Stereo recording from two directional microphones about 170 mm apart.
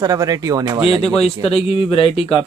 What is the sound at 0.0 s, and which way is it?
Speech, 20° right (ahead or behind).